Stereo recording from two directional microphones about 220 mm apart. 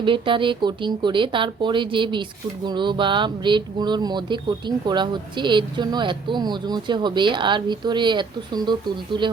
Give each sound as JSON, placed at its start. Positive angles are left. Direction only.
{"t": 0.0, "sound": "speech", "side_deg": -25}